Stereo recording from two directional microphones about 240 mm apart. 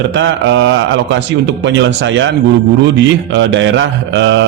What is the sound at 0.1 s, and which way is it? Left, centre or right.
Mantra, right.